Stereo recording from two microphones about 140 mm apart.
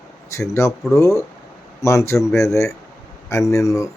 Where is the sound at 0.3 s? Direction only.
20° left (ahead or behind).